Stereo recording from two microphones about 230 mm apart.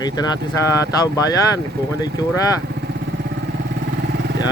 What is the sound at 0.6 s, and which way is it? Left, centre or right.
Speech, centre.